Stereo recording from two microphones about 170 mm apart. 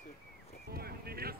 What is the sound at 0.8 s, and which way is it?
Horse, 65° right (ahead or behind).